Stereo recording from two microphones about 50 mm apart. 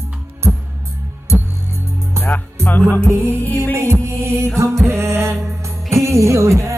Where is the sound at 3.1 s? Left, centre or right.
Right.